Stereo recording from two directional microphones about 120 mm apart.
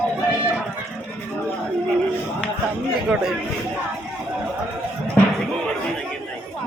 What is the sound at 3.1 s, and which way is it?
Speech, 5° right (ahead or behind).